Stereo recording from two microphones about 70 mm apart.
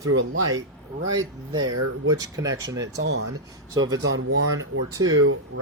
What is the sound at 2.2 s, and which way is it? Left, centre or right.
Speech, right.